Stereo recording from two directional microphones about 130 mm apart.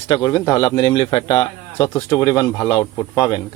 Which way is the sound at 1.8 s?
25° left (ahead or behind).